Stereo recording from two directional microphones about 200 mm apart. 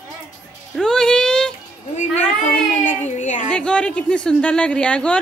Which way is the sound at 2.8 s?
40° left (ahead or behind).